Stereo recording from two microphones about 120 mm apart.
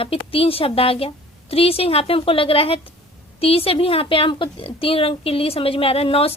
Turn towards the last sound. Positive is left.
turn(degrees=55)  # may be behind; listen again after turning